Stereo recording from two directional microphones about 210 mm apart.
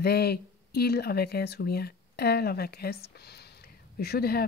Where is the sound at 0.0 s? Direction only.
50° left (ahead or behind).